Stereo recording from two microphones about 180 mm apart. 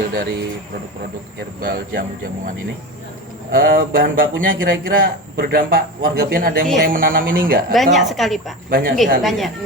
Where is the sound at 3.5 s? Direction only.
50° right (ahead or behind).